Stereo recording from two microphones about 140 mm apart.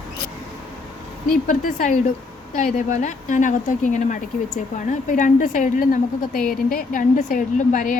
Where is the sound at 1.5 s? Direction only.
70° left (ahead or behind).